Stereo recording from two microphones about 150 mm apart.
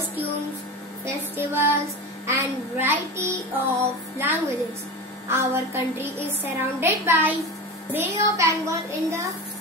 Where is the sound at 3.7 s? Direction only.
15° right (ahead or behind).